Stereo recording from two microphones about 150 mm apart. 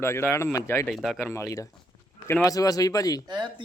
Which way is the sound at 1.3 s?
20° left (ahead or behind).